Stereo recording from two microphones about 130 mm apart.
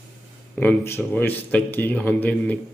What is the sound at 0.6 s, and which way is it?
Speech, 15° left (ahead or behind).